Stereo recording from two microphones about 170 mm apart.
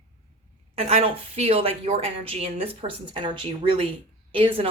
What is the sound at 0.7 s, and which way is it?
A woman's voice, 35° right (ahead or behind).